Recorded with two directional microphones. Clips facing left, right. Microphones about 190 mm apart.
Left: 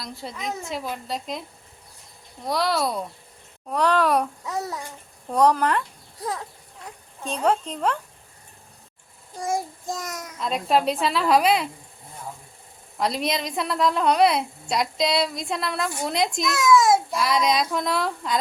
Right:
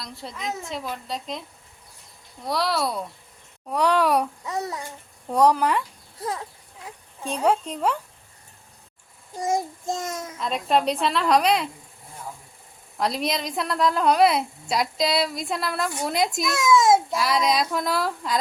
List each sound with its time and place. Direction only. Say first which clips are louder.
0.0 s a woman's voice: left 1 dB; centre (ahead or behind)
2.5 s a woman's voice: left 1 dB; centre (ahead or behind)
3.7 s a child's voice: even; 10° right (ahead or behind)
4.4 s a woman's voice: even; centre (ahead or behind)
5.3 s speech: even; 10° right (ahead or behind)
9.4 s child singing: right 2 dB; 20° right (ahead or behind)
10.3 s a woman's voice: left 1 dB; centre (ahead or behind)
13.0 s a woman's voice: even; centre (ahead or behind)
16.5 s a sound: even; 25° right (ahead or behind)
17.1 s a woman's voice: even; centre (ahead or behind)